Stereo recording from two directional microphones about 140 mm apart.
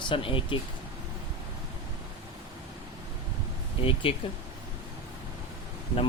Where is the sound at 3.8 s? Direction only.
40° left (ahead or behind).